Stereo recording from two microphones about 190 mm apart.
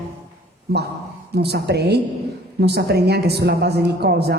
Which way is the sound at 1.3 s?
60° right (ahead or behind).